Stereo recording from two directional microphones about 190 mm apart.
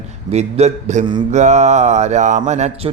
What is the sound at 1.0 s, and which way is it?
Mantra, 25° right (ahead or behind).